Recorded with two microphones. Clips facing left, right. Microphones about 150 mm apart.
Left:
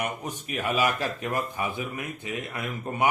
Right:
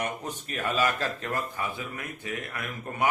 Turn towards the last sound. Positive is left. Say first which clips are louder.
# left 3 dB
turn(degrees=20)  # may be behind; listen again after turning